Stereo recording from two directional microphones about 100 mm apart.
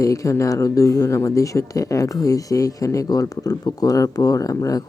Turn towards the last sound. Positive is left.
turn(degrees=35)  # may be behind; listen again after turning